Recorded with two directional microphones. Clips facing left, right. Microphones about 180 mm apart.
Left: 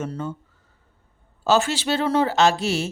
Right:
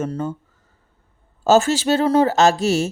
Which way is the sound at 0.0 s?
45° right (ahead or behind).